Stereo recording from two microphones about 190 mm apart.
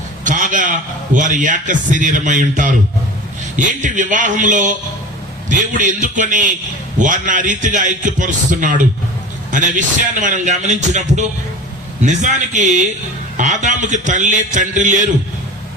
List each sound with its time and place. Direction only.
0.3 s a man's voice: 45° right (ahead or behind)